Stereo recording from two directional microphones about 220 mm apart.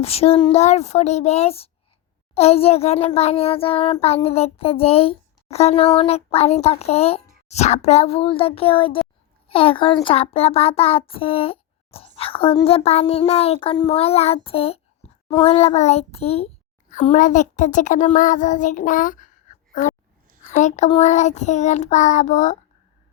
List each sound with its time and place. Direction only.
0.0 s a sound: 25° left (ahead or behind)
16.9 s a child's voice: 30° left (ahead or behind)
20.5 s a child's voice: 30° left (ahead or behind)